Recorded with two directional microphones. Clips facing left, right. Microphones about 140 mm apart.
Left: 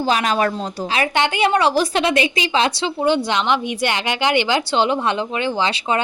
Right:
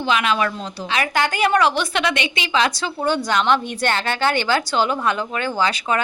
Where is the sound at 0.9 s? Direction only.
25° left (ahead or behind).